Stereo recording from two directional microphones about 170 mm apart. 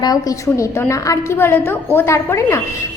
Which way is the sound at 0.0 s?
20° left (ahead or behind).